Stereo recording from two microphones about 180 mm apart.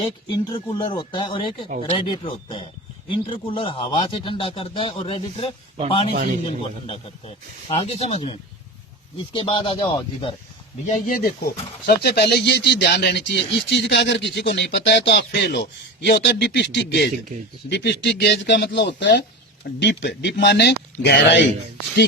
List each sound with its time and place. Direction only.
0.0 s a man's voice: 25° left (ahead or behind)
10.8 s speech: 45° left (ahead or behind)
11.9 s speech: 65° left (ahead or behind)